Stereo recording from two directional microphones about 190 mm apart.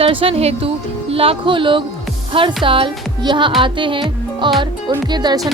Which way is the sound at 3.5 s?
25° right (ahead or behind).